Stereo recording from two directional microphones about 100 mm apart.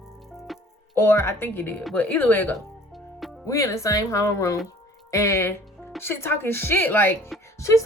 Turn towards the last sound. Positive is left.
turn(degrees=30)  # may be behind; listen again after turning